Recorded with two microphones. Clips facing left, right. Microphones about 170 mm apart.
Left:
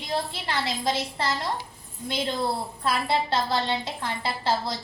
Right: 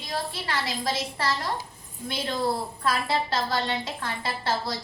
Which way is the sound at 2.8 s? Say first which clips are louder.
Left 1 dB; 25° left (ahead or behind).